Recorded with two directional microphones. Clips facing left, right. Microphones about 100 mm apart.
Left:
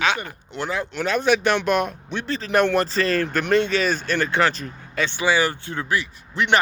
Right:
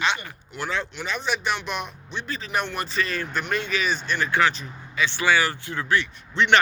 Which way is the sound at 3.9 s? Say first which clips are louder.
Left 3 dB; 50° left (ahead or behind).